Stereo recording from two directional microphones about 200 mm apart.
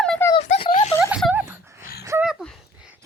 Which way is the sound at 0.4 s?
35° left (ahead or behind).